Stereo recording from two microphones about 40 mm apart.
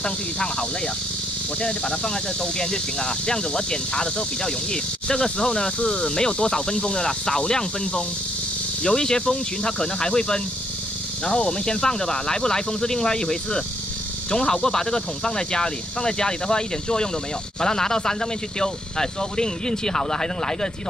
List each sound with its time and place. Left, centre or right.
0.0 s speech: left